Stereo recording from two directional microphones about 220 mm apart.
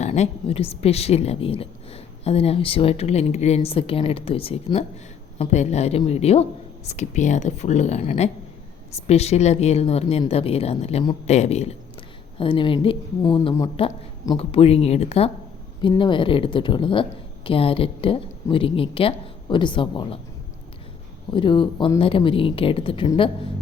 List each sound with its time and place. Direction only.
0.0 s a woman's voice: 30° left (ahead or behind)
21.2 s a woman's voice: 20° left (ahead or behind)